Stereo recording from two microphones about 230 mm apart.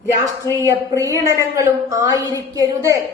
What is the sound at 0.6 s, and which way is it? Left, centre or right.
A woman's voice, centre.